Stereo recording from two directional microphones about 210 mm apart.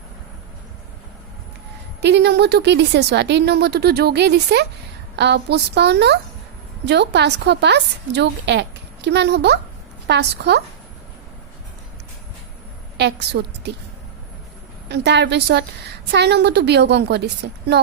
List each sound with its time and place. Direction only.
2.0 s a woman's voice: 50° right (ahead or behind)
13.0 s a woman's voice: 55° right (ahead or behind)
14.8 s a woman's voice: 55° right (ahead or behind)